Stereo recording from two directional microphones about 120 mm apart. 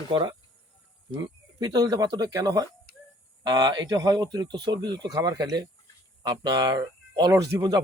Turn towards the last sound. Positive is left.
turn(degrees=-30)  # may be behind; listen again after turning